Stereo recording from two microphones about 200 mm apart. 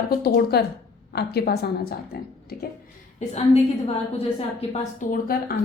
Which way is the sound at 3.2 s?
30° left (ahead or behind).